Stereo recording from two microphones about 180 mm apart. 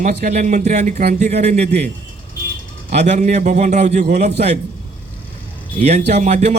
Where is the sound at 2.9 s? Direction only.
40° right (ahead or behind).